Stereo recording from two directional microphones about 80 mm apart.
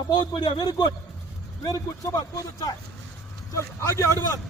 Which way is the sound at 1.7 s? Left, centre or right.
Left.